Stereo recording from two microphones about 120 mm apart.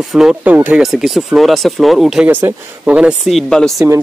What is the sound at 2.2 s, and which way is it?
Speech, 15° right (ahead or behind).